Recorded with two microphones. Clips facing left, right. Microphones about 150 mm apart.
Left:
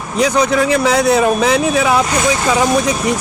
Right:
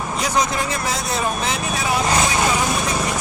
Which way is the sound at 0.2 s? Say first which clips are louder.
Left 9 dB; 65° left (ahead or behind).